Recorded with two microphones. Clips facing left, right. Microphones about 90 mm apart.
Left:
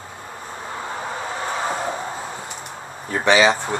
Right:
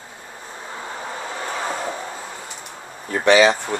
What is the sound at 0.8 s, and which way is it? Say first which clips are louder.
Vehicle: left 2 dB; 30° left (ahead or behind).